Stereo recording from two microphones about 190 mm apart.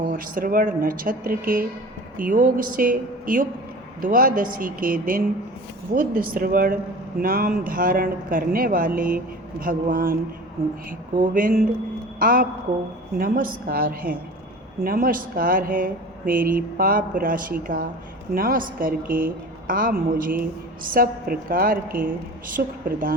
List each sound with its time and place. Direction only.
0.1 s speech: 45° right (ahead or behind)
11.2 s speech: 45° right (ahead or behind)